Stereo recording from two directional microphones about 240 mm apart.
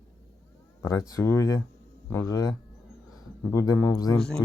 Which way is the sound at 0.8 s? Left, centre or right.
Centre.